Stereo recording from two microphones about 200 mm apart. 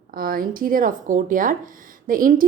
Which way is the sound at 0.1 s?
45° right (ahead or behind).